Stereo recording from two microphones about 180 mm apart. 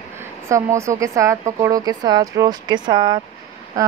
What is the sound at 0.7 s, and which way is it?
Speech, 15° right (ahead or behind).